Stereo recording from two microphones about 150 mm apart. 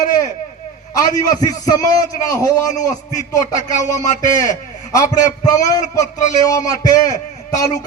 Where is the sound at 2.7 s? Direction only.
55° left (ahead or behind).